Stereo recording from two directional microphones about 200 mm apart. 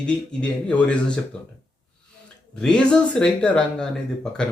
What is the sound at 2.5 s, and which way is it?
A man's voice, 5° left (ahead or behind).